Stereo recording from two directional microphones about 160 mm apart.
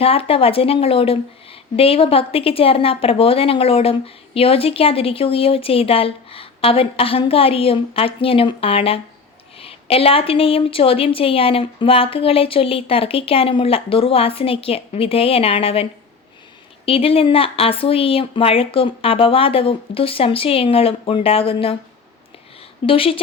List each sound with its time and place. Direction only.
0.0 s a woman's voice: 35° left (ahead or behind)
22.9 s a woman's voice: 35° left (ahead or behind)